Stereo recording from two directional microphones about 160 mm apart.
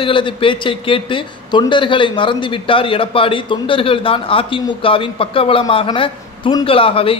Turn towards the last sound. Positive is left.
turn(degrees=35)  # may be behind; listen again after turning